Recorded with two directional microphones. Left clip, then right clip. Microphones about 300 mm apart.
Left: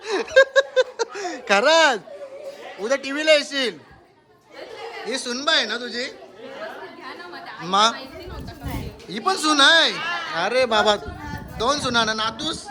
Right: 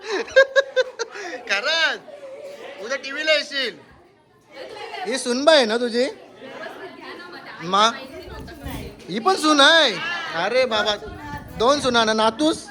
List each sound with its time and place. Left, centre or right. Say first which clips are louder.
0.0 s a sound: even; centre
2.8 s a man's voice: left 3 dB; left
5.0 s a woman's voice: right 6 dB; centre
7.6 s speech: even; centre
9.0 s speech: right 2 dB; centre
10.0 s a sound: even; left
10.3 s speech: left 1 dB; centre
11.5 s speech: right 3 dB; centre